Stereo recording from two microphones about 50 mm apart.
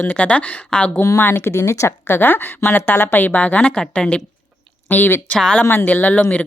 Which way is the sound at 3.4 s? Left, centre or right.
Left.